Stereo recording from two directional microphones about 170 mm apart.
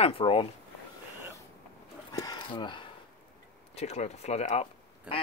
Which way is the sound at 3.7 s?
40° left (ahead or behind).